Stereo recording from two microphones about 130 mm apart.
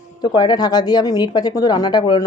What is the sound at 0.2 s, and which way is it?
Speech, 30° left (ahead or behind).